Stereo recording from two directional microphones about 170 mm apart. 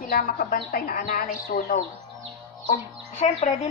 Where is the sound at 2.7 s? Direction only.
45° left (ahead or behind).